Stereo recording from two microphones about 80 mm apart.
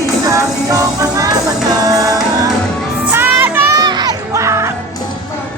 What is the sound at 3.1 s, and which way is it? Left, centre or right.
Music, right.